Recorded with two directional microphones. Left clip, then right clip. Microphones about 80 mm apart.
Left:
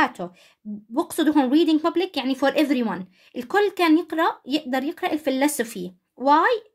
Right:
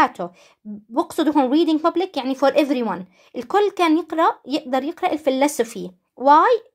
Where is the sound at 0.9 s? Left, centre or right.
Right.